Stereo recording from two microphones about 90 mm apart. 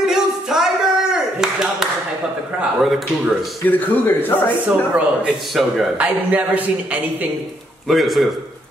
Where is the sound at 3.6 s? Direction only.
20° left (ahead or behind).